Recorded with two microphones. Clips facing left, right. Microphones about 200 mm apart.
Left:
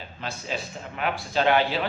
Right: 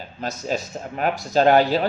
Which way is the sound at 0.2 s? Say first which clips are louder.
Right 6 dB; 40° right (ahead or behind).